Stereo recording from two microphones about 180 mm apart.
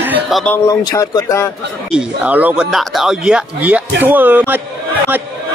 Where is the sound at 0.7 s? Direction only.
20° left (ahead or behind).